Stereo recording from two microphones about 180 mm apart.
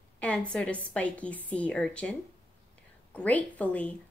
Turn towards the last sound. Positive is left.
turn(degrees=10)  # may be behind; listen again after turning